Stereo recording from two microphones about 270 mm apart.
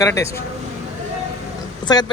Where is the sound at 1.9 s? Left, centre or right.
Centre.